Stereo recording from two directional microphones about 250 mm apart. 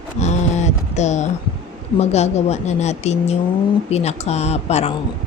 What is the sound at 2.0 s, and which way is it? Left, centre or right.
A woman's voice, left.